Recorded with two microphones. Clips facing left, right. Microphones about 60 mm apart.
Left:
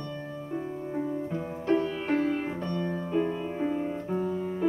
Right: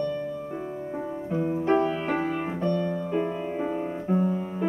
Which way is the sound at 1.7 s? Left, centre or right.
Right.